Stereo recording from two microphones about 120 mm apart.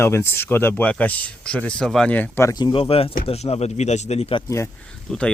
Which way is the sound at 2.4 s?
35° left (ahead or behind).